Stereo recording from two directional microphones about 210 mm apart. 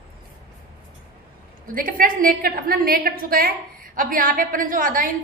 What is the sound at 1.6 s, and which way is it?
A woman's voice, 40° right (ahead or behind).